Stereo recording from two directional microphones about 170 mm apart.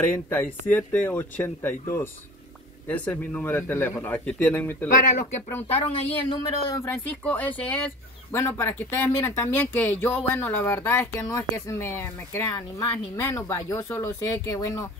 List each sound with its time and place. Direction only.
0.3 s speech: 10° left (ahead or behind)
4.9 s speech: 55° left (ahead or behind)
6.3 s speech: 20° left (ahead or behind)